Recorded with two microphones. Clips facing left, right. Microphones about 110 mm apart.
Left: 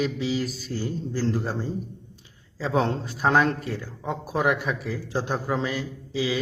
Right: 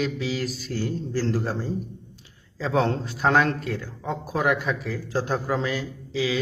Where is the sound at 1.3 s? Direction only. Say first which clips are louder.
Right 1 dB; centre (ahead or behind).